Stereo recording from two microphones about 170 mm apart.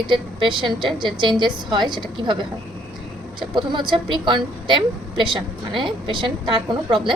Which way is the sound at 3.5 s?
30° right (ahead or behind).